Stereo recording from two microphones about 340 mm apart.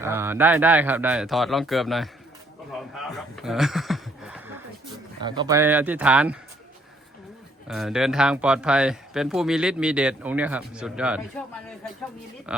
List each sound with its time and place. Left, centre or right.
0.0 s speech: centre
2.9 s a sound: centre
5.2 s speech: centre
7.7 s speech: centre
12.5 s speech: centre